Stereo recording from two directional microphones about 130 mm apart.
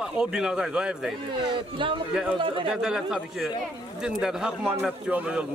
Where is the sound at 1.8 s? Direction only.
40° right (ahead or behind).